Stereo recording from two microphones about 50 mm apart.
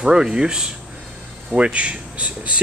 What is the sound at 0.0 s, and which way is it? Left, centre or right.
Speech, centre.